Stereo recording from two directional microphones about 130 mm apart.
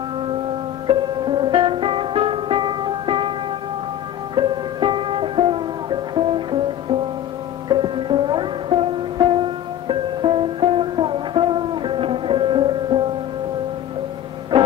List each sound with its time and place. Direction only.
0.8 s music: 40° right (ahead or behind)
4.4 s music: 40° right (ahead or behind)